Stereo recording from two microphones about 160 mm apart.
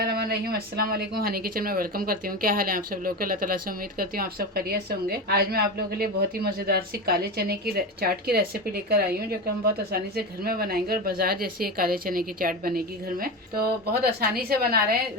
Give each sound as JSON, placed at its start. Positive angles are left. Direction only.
{"t": 0.0, "sound": "speech", "side_deg": -75}